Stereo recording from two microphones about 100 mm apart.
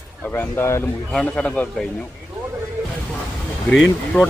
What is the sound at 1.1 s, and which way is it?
Speech, 10° left (ahead or behind).